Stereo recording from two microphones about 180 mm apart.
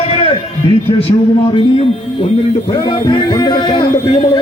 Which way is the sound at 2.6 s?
25° left (ahead or behind).